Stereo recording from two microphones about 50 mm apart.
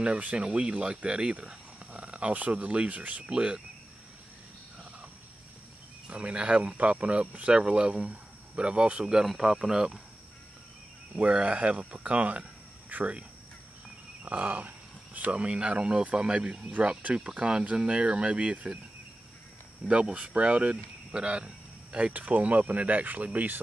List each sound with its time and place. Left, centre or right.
0.0 s speech: right
3.3 s speech: centre
6.0 s speech: right
11.1 s speech: right
14.2 s a sound: right
15.1 s speech: right
19.9 s speech: right
21.9 s speech: right